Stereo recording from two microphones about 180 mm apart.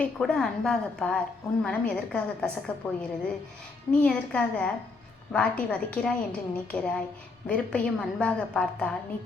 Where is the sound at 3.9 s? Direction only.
5° left (ahead or behind).